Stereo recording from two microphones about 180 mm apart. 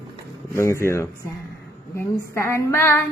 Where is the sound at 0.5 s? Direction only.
15° left (ahead or behind).